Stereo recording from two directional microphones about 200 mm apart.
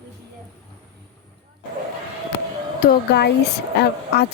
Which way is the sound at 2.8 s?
55° left (ahead or behind).